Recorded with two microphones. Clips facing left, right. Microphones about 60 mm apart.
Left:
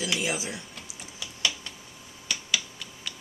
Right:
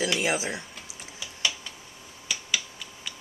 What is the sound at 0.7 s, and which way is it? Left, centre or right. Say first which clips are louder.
Typing: even; centre.